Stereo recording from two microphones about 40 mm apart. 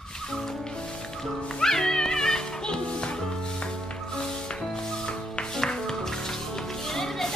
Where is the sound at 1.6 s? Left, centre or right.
Centre.